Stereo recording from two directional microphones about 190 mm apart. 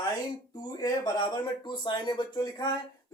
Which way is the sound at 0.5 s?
20° left (ahead or behind).